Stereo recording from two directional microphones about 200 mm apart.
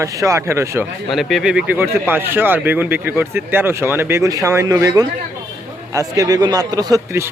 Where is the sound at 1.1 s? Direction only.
Centre (ahead or behind).